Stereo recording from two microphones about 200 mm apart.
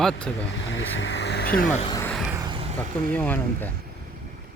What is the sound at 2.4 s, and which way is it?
Vehicle, 20° right (ahead or behind).